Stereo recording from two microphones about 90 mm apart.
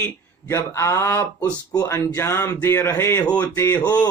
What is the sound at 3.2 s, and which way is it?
Speech, 15° left (ahead or behind).